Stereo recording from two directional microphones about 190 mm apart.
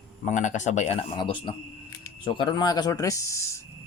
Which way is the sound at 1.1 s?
25° left (ahead or behind).